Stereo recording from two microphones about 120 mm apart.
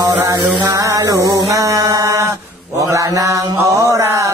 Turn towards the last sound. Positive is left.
turn(degrees=-25)  # may be behind; listen again after turning